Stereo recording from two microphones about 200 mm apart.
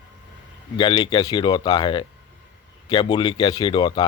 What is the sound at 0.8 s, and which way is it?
Speech, 25° left (ahead or behind).